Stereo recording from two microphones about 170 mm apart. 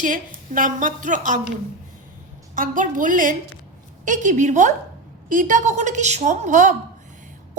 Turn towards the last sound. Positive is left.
turn(degrees=-45)  # may be behind; listen again after turning